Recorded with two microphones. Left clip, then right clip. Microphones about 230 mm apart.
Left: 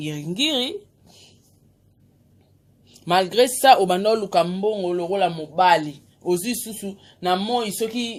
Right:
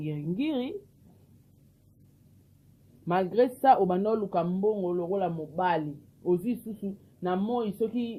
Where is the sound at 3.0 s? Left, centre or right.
Centre.